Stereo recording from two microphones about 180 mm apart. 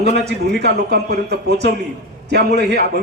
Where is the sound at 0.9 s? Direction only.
65° right (ahead or behind).